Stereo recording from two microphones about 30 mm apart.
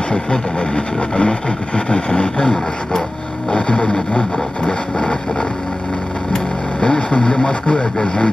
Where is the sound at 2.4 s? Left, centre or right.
Left.